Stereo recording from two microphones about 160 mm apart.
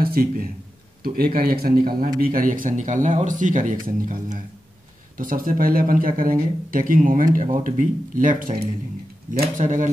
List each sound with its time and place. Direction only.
0.0 s a man's voice: 65° right (ahead or behind)